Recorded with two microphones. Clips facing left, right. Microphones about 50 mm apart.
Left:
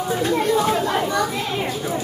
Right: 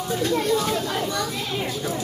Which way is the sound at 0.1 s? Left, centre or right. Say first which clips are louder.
Left 2 dB; centre.